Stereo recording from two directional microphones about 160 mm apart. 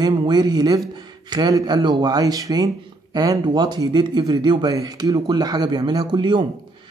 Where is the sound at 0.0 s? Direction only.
25° right (ahead or behind).